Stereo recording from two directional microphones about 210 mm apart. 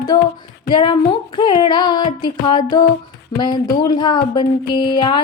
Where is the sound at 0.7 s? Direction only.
20° left (ahead or behind).